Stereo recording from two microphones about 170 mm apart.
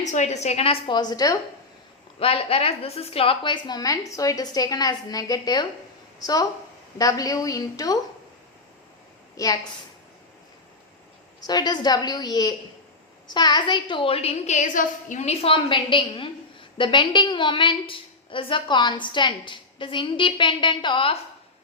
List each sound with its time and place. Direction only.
0.0 s a woman's voice: 45° left (ahead or behind); by 1.4 s 20° left (ahead or behind)
2.1 s a woman's voice: 35° left (ahead or behind)
9.3 s a woman's voice: 20° left (ahead or behind)
11.4 s a woman's voice: 25° left (ahead or behind)